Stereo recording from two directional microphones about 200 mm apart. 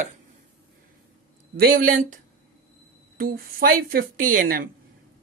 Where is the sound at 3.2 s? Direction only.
45° right (ahead or behind).